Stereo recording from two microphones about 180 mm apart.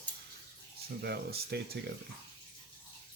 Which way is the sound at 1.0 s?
65° right (ahead or behind).